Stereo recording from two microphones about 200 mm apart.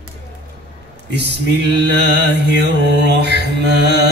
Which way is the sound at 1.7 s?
55° right (ahead or behind).